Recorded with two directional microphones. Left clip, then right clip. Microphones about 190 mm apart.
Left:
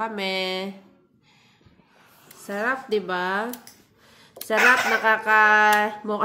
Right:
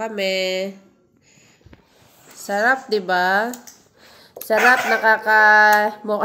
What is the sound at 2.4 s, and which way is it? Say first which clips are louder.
A woman's voice: right 8 dB; 5° right (ahead or behind).